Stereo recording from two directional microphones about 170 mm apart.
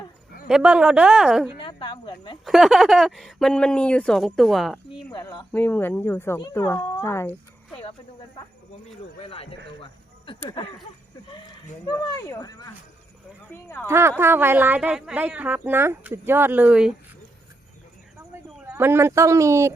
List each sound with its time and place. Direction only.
0.4 s speech: 5° right (ahead or behind)
1.5 s speech: 30° left (ahead or behind)
2.4 s speech: centre (ahead or behind)
5.2 s speech: 25° left (ahead or behind)
5.5 s speech: 10° left (ahead or behind)
9.2 s a man's voice: 35° left (ahead or behind)
12.1 s speech: 20° left (ahead or behind)
13.8 s speech: 15° right (ahead or behind)
18.2 s a sound: 15° right (ahead or behind)